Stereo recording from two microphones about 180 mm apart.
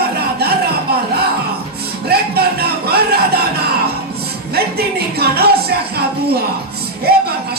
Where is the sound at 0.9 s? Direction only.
60° right (ahead or behind).